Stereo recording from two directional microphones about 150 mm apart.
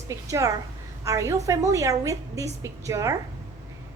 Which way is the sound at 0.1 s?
20° right (ahead or behind).